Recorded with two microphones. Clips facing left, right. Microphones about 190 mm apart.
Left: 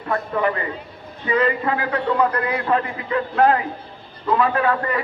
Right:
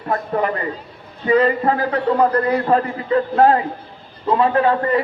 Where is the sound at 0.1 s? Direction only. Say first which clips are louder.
Right 1 dB; 40° right (ahead or behind).